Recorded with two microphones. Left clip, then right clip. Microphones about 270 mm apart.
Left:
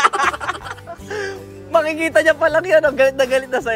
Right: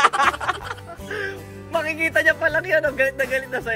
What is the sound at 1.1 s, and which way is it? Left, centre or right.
Speech, left.